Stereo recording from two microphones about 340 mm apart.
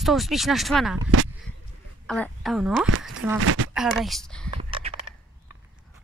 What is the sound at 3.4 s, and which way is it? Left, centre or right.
Speech, right.